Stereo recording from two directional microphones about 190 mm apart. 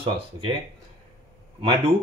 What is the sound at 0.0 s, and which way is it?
Speech, 30° right (ahead or behind).